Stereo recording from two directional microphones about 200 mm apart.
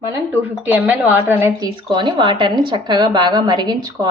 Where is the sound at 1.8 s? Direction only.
25° right (ahead or behind).